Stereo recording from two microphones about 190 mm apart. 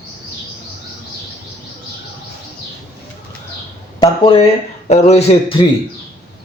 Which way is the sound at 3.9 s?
25° left (ahead or behind).